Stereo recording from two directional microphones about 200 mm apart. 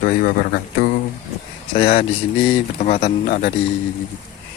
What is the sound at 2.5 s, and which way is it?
Speech, 35° left (ahead or behind).